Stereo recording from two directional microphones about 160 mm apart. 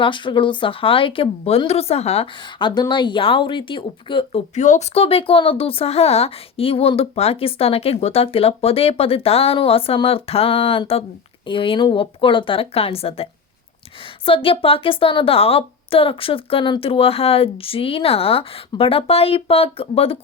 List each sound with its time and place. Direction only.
0.0 s speech: 30° left (ahead or behind)
14.3 s speech: 35° left (ahead or behind)